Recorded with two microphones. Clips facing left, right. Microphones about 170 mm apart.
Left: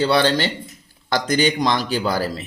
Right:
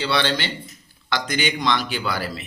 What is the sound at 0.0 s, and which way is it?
Speech, 45° left (ahead or behind).